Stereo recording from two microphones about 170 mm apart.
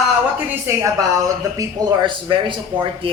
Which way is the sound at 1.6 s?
25° right (ahead or behind).